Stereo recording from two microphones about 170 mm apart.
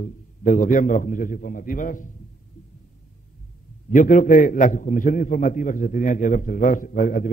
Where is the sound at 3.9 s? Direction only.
50° left (ahead or behind).